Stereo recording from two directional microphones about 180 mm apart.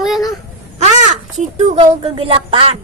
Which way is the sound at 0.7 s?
40° right (ahead or behind).